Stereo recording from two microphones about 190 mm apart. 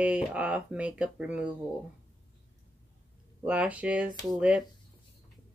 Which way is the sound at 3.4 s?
5° right (ahead or behind).